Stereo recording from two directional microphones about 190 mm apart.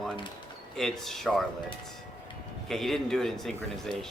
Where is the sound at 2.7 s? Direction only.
Centre (ahead or behind).